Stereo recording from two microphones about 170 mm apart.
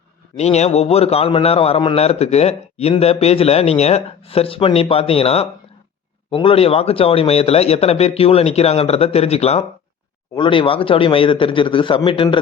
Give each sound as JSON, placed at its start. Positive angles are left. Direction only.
{"t": 0.3, "sound": "a man's voice", "side_deg": 40}